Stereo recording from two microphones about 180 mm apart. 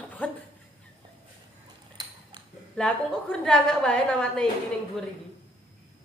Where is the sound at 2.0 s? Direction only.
20° right (ahead or behind).